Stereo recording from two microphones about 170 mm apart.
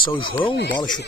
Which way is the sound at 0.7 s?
25° left (ahead or behind).